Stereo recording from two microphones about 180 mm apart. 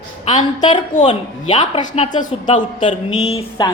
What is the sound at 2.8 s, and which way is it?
Speech, 35° left (ahead or behind).